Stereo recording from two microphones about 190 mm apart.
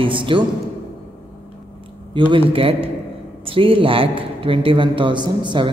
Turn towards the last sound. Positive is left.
turn(degrees=-25)  # may be behind; listen again after turning